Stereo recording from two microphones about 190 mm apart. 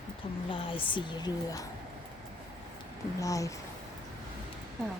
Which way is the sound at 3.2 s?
15° left (ahead or behind).